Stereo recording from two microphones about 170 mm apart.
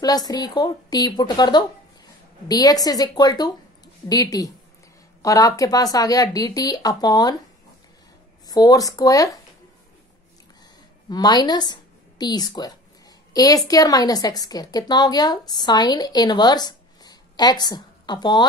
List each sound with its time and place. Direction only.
0.0 s a woman's voice: 25° left (ahead or behind)
8.5 s a woman's voice: 20° left (ahead or behind)
11.1 s a woman's voice: 25° left (ahead or behind)